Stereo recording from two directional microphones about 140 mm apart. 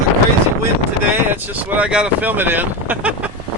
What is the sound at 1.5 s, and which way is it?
Speech, 10° right (ahead or behind).